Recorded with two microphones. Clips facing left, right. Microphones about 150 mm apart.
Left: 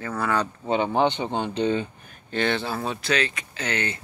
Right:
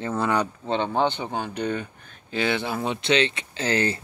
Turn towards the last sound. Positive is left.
turn(degrees=-35)  # may be behind; listen again after turning